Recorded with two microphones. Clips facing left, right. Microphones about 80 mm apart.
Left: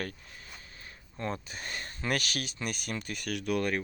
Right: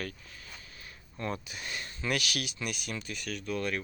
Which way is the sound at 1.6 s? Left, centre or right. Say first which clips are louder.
Even; left.